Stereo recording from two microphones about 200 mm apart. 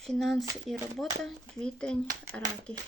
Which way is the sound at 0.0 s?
Centre (ahead or behind).